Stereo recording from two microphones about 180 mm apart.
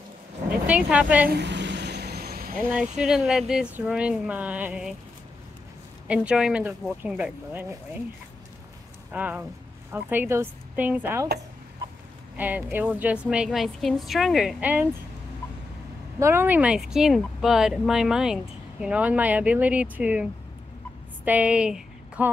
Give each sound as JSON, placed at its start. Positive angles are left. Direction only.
{"t": 0.7, "sound": "speech", "side_deg": -5}
{"t": 1.3, "sound": "vehicle", "side_deg": -75}
{"t": 3.0, "sound": "a woman's voice", "side_deg": -5}
{"t": 6.0, "sound": "speech", "side_deg": -5}
{"t": 9.1, "sound": "speech", "side_deg": -10}
{"t": 12.4, "sound": "a woman's voice", "side_deg": -10}
{"t": 16.2, "sound": "a woman's voice", "side_deg": -15}